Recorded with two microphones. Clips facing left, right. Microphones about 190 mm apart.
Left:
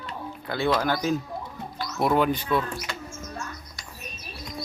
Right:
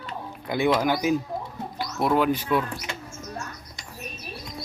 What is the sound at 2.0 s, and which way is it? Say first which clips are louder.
Speech: even; centre (ahead or behind).